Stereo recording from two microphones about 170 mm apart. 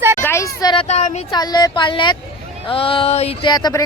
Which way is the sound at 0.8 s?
45° left (ahead or behind).